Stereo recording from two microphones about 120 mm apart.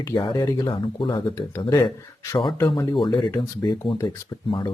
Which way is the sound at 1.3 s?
25° left (ahead or behind).